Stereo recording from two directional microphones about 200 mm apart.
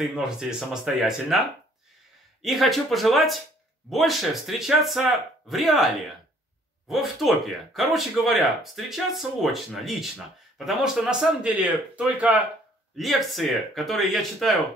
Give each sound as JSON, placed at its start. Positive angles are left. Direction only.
{"t": 0.0, "sound": "speech", "side_deg": 0}